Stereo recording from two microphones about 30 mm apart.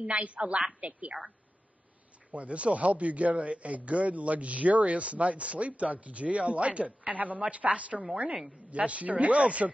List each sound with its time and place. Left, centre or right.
0.4 s speech: right
0.7 s a man's voice: right
2.3 s a man's voice: right